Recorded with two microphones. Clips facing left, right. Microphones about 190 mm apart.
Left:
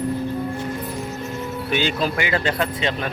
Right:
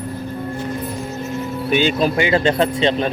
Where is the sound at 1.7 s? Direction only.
20° right (ahead or behind).